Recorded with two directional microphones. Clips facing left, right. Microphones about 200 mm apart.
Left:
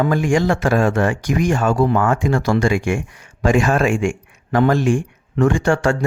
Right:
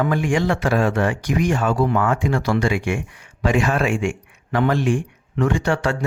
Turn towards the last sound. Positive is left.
turn(degrees=45)  # may be behind; listen again after turning